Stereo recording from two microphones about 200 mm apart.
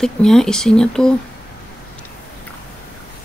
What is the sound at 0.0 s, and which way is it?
Speech, centre (ahead or behind).